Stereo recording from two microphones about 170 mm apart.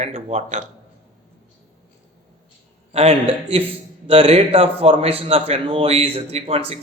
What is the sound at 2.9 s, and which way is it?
A man's voice, 35° right (ahead or behind).